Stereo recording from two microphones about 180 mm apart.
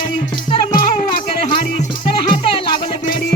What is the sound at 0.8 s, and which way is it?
Music, 50° left (ahead or behind).